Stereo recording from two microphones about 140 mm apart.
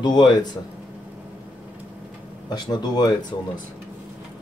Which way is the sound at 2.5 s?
30° left (ahead or behind).